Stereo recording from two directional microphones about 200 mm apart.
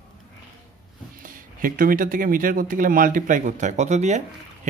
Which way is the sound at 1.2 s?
45° right (ahead or behind).